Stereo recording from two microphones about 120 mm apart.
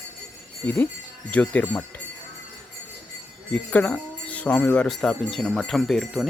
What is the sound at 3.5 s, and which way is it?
Speech, 10° left (ahead or behind).